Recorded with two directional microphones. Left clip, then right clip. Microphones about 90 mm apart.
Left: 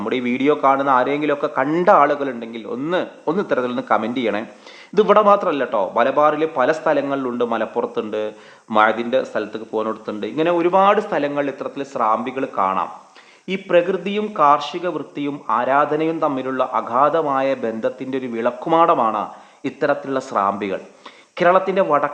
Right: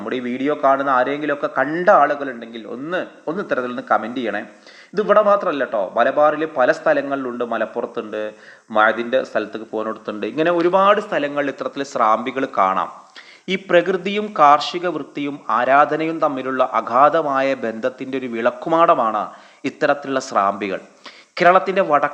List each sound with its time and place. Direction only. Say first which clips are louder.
0.0 s a man's voice: left 3 dB; 20° left (ahead or behind)
2.0 s a man's voice: left 2 dB; 25° left (ahead or behind); by 10.0 s centre (ahead or behind)
10.2 s a man's voice: right 1 dB; 25° right (ahead or behind)
10.9 s speech: left 1 dB; centre (ahead or behind)
11.5 s a man's voice: right 2 dB; 15° right (ahead or behind)